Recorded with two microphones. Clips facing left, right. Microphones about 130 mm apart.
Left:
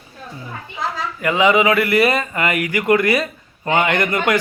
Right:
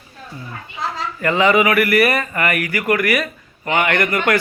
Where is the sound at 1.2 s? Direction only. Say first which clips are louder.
Even; 15° left (ahead or behind).